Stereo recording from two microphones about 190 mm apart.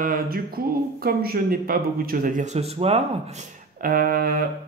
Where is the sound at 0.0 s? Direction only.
50° right (ahead or behind); by 3.0 s 35° right (ahead or behind).